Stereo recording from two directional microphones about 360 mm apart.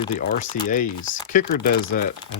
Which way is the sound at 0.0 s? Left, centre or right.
Left.